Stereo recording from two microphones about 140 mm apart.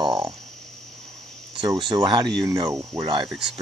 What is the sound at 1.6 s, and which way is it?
Speech, 35° right (ahead or behind).